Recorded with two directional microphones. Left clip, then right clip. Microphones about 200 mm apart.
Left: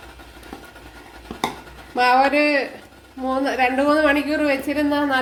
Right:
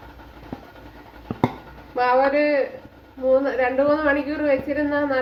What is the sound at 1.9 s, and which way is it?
Speech, 50° left (ahead or behind).